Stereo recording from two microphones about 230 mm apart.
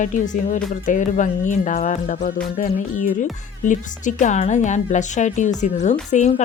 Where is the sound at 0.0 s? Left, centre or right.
Left.